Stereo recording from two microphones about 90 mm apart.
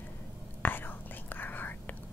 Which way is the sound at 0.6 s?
20° left (ahead or behind).